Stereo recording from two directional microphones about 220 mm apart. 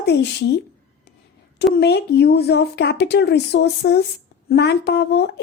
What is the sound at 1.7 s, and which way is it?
A woman's voice, 45° left (ahead or behind).